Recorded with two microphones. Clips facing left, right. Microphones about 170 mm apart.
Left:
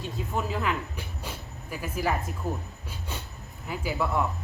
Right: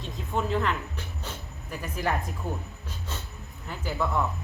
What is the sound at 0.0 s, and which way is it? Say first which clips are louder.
Speech: right 1 dB; 5° left (ahead or behind).